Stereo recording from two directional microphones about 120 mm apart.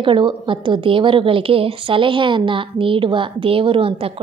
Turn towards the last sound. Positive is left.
turn(degrees=-50)  # may be behind; listen again after turning